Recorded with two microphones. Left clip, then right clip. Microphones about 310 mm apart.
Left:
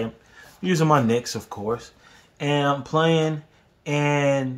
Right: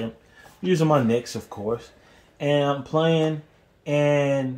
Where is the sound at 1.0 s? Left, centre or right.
Centre.